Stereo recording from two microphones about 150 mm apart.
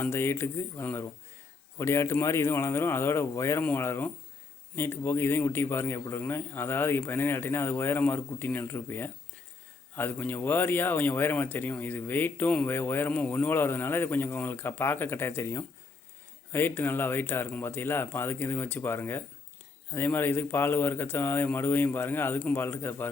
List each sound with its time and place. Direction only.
0.0 s speech: 15° left (ahead or behind)